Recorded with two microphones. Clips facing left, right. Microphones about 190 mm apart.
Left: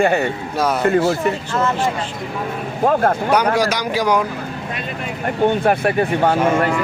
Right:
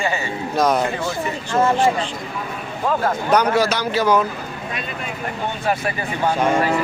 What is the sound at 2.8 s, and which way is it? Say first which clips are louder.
Speech: left 5 dB; 50° left (ahead or behind).